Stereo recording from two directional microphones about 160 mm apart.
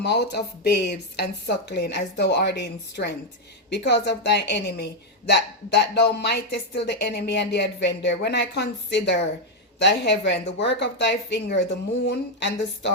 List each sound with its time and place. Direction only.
0.0 s a woman's voice: 90° left